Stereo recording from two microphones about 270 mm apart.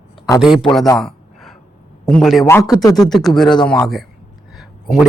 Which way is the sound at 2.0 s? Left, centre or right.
Centre.